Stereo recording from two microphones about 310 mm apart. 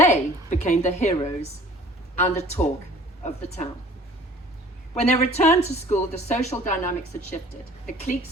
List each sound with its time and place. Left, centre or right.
0.0 s a woman's voice: left
4.9 s speech: left